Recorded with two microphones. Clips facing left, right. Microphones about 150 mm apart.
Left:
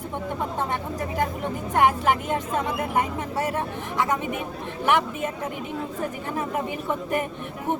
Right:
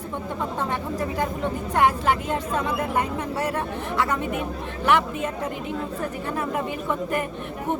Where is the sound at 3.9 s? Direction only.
15° left (ahead or behind).